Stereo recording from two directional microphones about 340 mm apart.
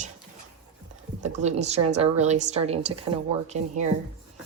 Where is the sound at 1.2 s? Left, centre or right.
Centre.